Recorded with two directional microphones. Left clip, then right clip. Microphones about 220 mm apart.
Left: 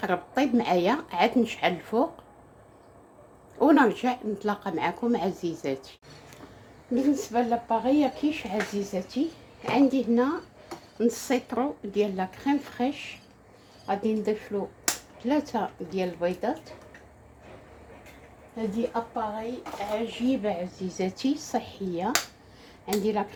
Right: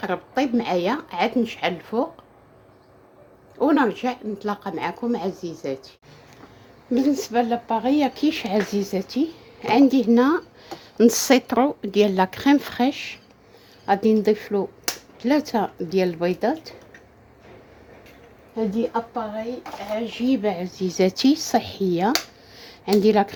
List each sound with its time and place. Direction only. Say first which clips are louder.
0.0 s speech: right 2 dB; 5° right (ahead or behind)
3.6 s speech: right 1 dB; centre (ahead or behind)
6.9 s speech: right 5 dB; 45° right (ahead or behind)
20.1 s speech: right 5 dB; 45° right (ahead or behind)